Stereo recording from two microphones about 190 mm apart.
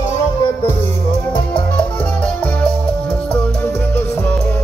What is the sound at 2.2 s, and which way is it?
Music, 5° left (ahead or behind).